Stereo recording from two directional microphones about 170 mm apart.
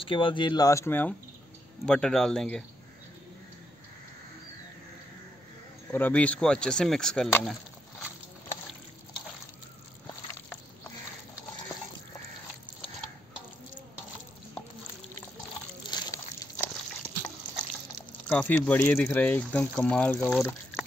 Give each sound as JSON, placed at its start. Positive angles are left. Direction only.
{"t": 0.0, "sound": "speech", "side_deg": 30}
{"t": 5.9, "sound": "speech", "side_deg": 10}
{"t": 15.9, "sound": "water", "side_deg": 20}
{"t": 18.3, "sound": "speech", "side_deg": 10}